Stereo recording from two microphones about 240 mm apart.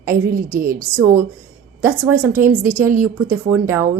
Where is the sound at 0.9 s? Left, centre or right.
Centre.